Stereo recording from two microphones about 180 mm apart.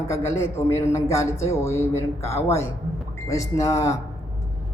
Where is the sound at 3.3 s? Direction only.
15° left (ahead or behind).